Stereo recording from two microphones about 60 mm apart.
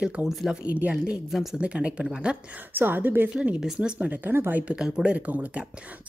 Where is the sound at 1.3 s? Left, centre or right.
Centre.